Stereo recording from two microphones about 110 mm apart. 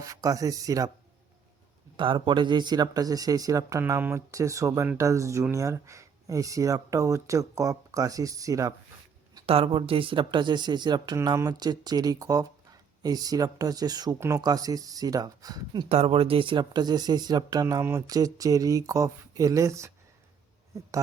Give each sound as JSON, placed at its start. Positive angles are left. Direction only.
{"t": 0.0, "sound": "speech", "side_deg": -30}
{"t": 2.0, "sound": "speech", "side_deg": -50}
{"t": 9.5, "sound": "speech", "side_deg": -60}
{"t": 14.2, "sound": "speech", "side_deg": -25}
{"t": 15.9, "sound": "speech", "side_deg": -65}